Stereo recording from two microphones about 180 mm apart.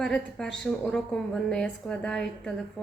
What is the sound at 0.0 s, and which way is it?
A woman's voice, centre (ahead or behind).